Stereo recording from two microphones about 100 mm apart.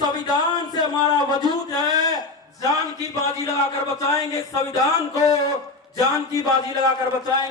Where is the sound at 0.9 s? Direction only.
45° left (ahead or behind).